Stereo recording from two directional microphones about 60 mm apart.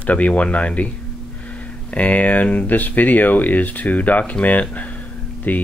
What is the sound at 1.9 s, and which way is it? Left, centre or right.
Speech, left.